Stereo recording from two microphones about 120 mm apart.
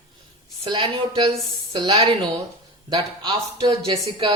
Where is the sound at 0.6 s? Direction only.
40° right (ahead or behind).